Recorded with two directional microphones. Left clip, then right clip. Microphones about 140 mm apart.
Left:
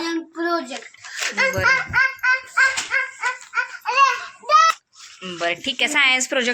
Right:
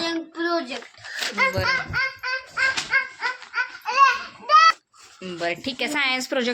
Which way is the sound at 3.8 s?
30° left (ahead or behind).